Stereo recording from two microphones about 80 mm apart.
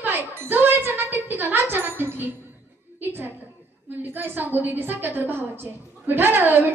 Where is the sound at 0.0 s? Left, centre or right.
Right.